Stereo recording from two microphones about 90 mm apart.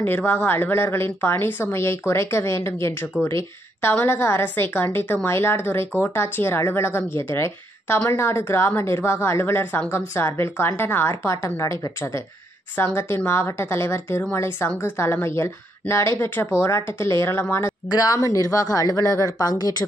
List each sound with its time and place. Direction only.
0.0 s speech: 25° left (ahead or behind)
12.7 s speech: 25° left (ahead or behind)
17.8 s speech: 45° left (ahead or behind)